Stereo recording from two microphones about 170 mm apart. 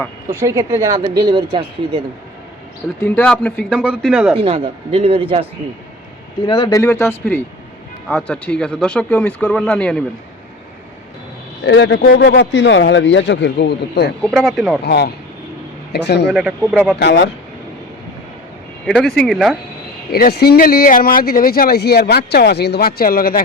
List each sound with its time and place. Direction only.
0.3 s speech: 15° right (ahead or behind); by 2.0 s 30° right (ahead or behind)
3.0 s speech: 5° left (ahead or behind)
4.4 s a man's voice: 35° right (ahead or behind)
6.4 s speech: 30° left (ahead or behind)
6.7 s speech: 20° left (ahead or behind)
11.6 s speech: 90° left
14.3 s speech: centre (ahead or behind)
14.8 s a man's voice: 75° left (ahead or behind)
16.3 s speech: 5° right (ahead or behind)
17.0 s speech: 90° left
18.9 s speech: centre (ahead or behind)
20.1 s speech: 65° left (ahead or behind)